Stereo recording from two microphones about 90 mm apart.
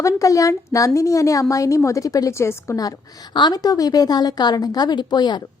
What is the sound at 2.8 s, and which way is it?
A woman's voice, 50° left (ahead or behind).